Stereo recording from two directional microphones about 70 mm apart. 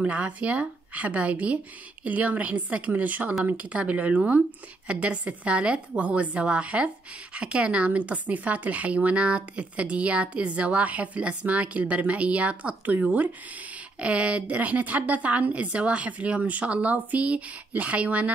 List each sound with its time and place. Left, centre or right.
0.0 s a woman's voice: centre